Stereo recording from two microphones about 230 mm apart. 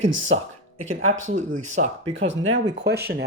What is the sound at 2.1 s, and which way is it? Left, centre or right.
Speech, right.